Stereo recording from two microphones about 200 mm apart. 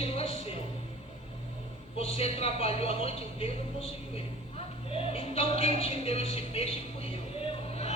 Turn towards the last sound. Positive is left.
turn(degrees=30)  # may be behind; listen again after turning